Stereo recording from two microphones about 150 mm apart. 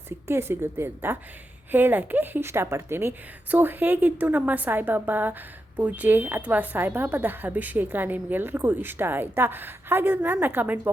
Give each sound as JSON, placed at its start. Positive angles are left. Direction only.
{"t": 0.3, "sound": "a woman's voice", "side_deg": -15}